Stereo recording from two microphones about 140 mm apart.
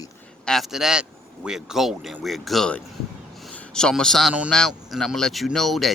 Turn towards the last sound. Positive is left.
turn(degrees=0)  # may be behind; listen again after turning